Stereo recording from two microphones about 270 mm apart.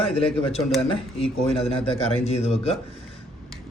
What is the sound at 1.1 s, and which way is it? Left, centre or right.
A man's voice, left.